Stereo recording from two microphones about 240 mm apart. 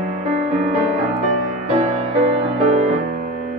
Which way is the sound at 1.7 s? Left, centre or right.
Right.